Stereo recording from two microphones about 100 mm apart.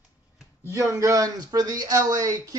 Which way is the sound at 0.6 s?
25° right (ahead or behind).